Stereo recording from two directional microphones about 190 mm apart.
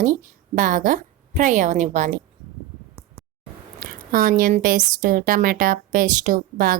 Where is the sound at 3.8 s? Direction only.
50° right (ahead or behind).